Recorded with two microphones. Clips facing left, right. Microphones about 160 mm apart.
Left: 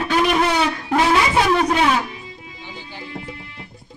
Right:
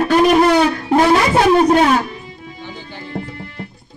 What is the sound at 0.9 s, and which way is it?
Music, 45° right (ahead or behind).